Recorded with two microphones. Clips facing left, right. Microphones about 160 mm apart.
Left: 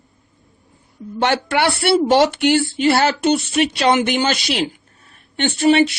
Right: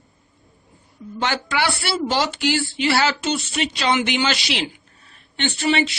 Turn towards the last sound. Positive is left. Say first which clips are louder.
# left 7 dB
turn(degrees=45)  # may be behind; listen again after turning